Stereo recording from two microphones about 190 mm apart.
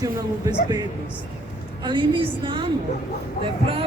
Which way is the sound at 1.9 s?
25° right (ahead or behind).